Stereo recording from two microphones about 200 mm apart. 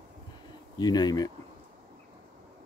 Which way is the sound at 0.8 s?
20° left (ahead or behind).